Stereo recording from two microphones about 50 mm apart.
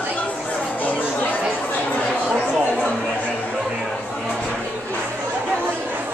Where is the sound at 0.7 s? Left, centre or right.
Left.